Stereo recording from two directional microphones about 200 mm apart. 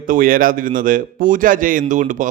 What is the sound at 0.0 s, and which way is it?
A man's voice, 45° right (ahead or behind).